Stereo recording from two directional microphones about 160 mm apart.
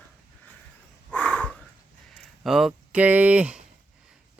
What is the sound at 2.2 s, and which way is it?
Speech, centre (ahead or behind).